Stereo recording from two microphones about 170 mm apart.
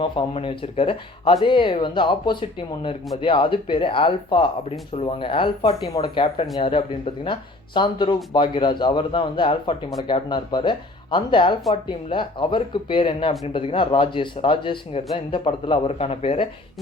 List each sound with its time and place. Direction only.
0.0 s speech: 30° left (ahead or behind)